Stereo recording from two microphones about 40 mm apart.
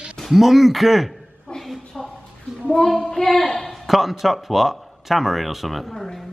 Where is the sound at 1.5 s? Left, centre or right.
Centre.